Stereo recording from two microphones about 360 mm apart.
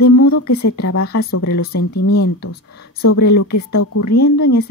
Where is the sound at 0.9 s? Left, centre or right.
Left.